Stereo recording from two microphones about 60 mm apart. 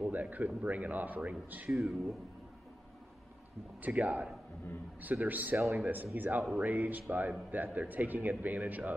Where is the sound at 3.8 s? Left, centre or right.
Right.